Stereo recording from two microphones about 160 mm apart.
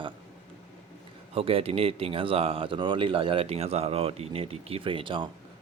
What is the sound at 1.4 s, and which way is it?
Speech, 35° right (ahead or behind).